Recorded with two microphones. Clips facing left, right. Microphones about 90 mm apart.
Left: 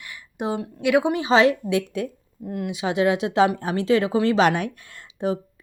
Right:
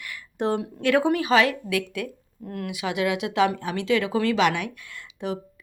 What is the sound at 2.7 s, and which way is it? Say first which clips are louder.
A woman's voice: left 4 dB; 30° left (ahead or behind).